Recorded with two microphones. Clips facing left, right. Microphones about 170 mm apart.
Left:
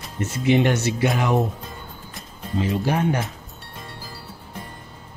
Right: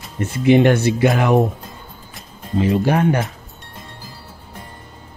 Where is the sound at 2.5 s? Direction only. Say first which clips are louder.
Right 6 dB; 60° right (ahead or behind).